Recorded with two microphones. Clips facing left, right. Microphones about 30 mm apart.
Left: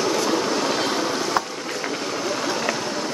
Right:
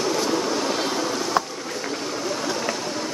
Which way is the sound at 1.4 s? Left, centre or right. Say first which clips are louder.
Right 3 dB; centre.